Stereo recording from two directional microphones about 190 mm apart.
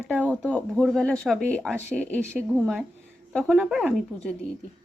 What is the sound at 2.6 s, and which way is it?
Speech, 5° right (ahead or behind).